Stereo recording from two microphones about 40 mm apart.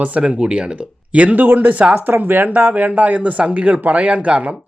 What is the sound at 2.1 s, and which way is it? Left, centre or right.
Speech, right.